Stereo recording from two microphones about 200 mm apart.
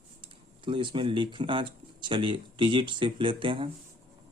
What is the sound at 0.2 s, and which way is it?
Speech, 25° right (ahead or behind).